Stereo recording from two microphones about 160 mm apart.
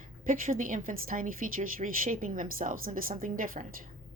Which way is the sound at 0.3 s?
60° right (ahead or behind).